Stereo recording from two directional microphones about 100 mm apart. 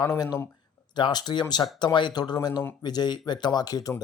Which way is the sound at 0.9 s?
45° left (ahead or behind).